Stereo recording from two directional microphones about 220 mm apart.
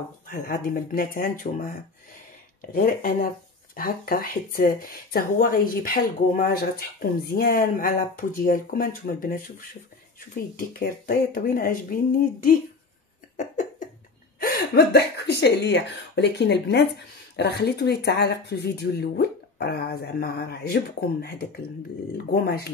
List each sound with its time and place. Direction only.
0.3 s speech: 40° left (ahead or behind)
2.7 s speech: 40° left (ahead or behind)
10.5 s speech: 40° left (ahead or behind)
13.4 s cough: 35° left (ahead or behind)
14.4 s speech: 45° left (ahead or behind)